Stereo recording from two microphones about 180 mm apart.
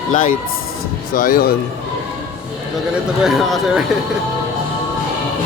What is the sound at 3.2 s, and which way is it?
Speech, centre (ahead or behind).